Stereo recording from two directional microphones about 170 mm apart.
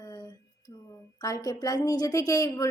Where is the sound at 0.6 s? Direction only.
25° left (ahead or behind).